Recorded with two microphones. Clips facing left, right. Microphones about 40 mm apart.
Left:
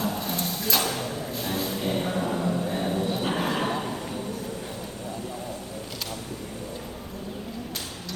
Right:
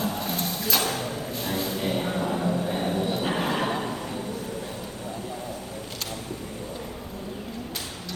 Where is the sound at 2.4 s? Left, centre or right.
Right.